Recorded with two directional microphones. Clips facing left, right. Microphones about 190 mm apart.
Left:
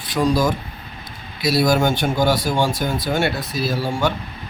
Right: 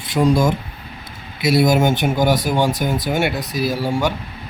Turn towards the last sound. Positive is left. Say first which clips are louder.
# right 2 dB
turn(degrees=-15)  # may be behind; listen again after turning